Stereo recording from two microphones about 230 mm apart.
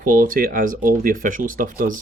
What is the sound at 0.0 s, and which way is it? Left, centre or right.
Speech, right.